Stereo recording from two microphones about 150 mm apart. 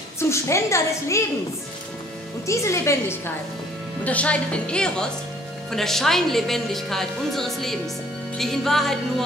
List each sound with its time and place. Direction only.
0.2 s a woman's voice: 20° left (ahead or behind)
2.4 s a woman's voice: 20° left (ahead or behind); by 9.0 s centre (ahead or behind)